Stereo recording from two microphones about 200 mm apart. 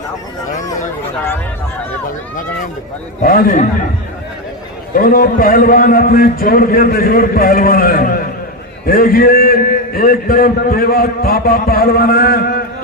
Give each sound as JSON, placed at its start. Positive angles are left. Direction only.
{"t": 3.2, "sound": "a man's voice", "side_deg": 45}
{"t": 4.9, "sound": "a man's voice", "side_deg": 45}